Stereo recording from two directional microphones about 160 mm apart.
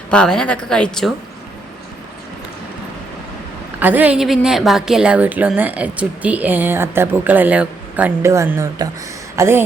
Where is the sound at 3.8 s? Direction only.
10° right (ahead or behind).